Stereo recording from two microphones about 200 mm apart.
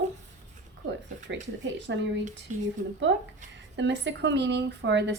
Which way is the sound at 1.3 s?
65° right (ahead or behind).